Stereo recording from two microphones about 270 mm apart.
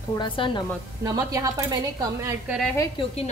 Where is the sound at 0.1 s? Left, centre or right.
Centre.